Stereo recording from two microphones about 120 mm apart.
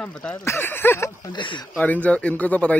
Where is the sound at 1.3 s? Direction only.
40° left (ahead or behind).